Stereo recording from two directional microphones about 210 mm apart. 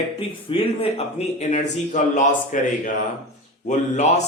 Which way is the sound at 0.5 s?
25° left (ahead or behind).